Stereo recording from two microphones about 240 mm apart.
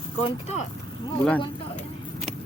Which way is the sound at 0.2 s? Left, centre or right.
Left.